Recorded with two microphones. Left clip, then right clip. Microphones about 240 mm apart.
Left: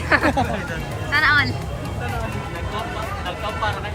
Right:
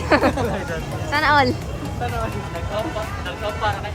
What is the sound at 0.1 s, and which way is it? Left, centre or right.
Speech, centre.